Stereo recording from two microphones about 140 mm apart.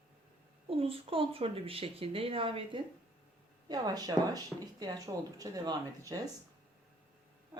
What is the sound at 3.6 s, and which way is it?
Speech, 30° right (ahead or behind).